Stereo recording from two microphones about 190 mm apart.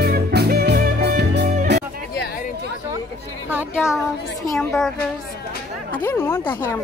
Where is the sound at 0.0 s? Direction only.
55° right (ahead or behind).